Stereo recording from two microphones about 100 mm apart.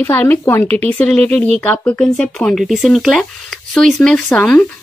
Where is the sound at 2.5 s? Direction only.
Centre (ahead or behind).